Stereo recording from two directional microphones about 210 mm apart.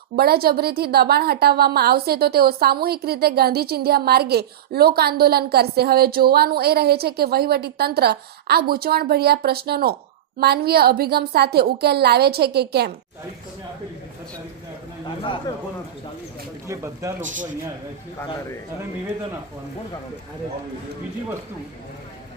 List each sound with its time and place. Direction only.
0.2 s a woman's voice: 50° right (ahead or behind)
15.0 s a sound: 25° left (ahead or behind)
16.6 s speech: 15° right (ahead or behind)
17.2 s speech: 35° right (ahead or behind)